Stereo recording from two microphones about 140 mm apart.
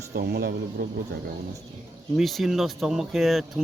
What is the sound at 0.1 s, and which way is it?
Speech, 90° right.